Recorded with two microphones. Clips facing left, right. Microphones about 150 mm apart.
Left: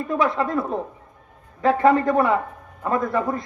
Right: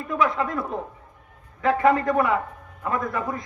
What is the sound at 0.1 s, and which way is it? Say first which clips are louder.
A man's voice: left 2 dB; 30° left (ahead or behind).